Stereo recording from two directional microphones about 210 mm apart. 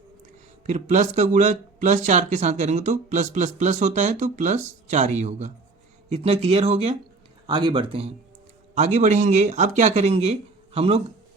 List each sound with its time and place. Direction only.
0.6 s speech: 35° right (ahead or behind)